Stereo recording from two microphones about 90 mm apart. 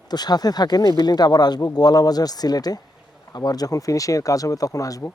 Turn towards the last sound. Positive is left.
turn(degrees=40)  # may be behind; listen again after turning